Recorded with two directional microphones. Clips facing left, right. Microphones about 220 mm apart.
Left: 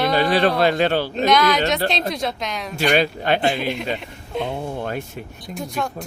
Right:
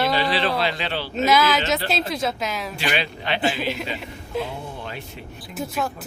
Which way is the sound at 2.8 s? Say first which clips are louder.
Left 10 dB; 45° left (ahead or behind).